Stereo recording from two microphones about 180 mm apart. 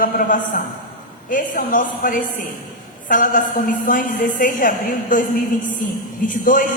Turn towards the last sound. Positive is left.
turn(degrees=45)  # may be behind; listen again after turning